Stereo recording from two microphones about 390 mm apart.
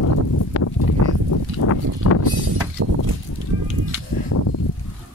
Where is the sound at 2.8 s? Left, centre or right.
Right.